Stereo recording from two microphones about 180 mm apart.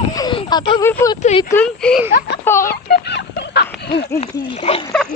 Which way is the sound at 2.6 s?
60° left (ahead or behind).